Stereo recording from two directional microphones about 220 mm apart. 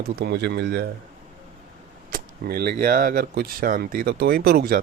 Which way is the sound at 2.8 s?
40° right (ahead or behind).